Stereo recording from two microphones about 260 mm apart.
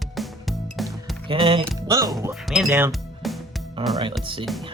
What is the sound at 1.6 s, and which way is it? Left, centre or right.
Music, centre.